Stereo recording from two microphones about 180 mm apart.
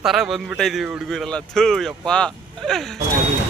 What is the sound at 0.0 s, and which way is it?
Speech, centre (ahead or behind).